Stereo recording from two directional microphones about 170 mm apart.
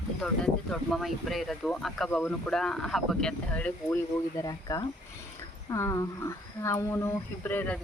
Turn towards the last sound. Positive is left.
turn(degrees=10)  # may be behind; listen again after turning